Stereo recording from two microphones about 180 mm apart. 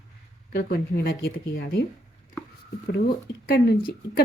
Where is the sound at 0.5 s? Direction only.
60° left (ahead or behind).